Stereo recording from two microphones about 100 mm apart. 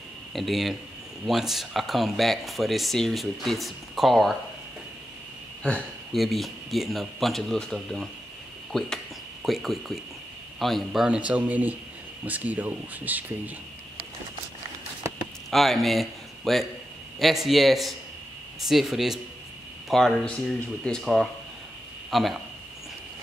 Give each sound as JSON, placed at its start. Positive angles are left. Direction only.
{"t": 0.3, "sound": "speech", "side_deg": 0}
{"t": 5.6, "sound": "speech", "side_deg": 10}
{"t": 6.1, "sound": "a man's voice", "side_deg": 0}
{"t": 15.5, "sound": "speech", "side_deg": 0}